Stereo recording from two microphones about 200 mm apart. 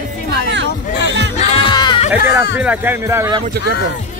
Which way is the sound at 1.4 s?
30° left (ahead or behind).